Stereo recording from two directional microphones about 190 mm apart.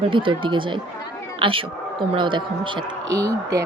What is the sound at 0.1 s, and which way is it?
A woman's voice, 25° right (ahead or behind).